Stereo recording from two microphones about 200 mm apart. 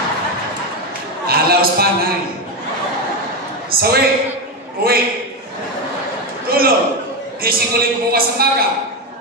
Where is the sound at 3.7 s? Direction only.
50° right (ahead or behind).